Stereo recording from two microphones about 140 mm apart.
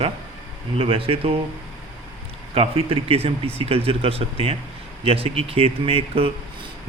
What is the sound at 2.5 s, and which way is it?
Speech, 40° right (ahead or behind).